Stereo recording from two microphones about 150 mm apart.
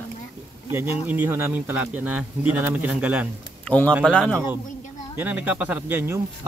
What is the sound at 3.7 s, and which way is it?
Speech, 10° left (ahead or behind).